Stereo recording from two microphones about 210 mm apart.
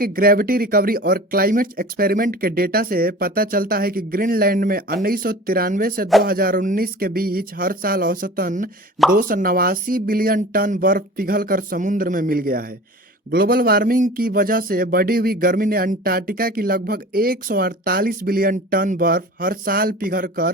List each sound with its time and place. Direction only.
0.0 s speech: 45° right (ahead or behind)